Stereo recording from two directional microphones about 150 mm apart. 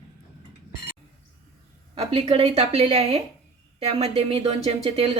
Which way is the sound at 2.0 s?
40° right (ahead or behind).